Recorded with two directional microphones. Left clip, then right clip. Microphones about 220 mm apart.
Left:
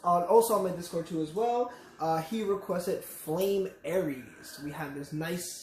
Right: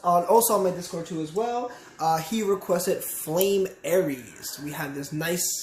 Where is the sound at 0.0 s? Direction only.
35° right (ahead or behind).